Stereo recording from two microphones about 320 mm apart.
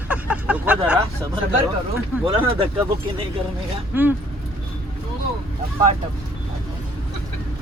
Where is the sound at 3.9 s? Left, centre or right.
Centre.